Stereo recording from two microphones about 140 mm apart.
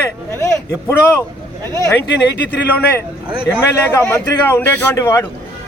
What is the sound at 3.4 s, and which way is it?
Speech, 15° left (ahead or behind).